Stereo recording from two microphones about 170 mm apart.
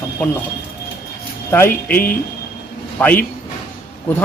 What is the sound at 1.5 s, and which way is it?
Speech, 10° left (ahead or behind).